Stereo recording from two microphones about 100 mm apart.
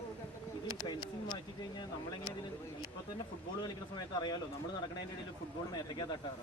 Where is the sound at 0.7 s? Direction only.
40° left (ahead or behind).